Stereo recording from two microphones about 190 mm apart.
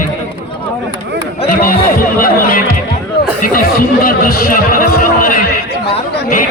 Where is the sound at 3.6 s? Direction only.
50° left (ahead or behind).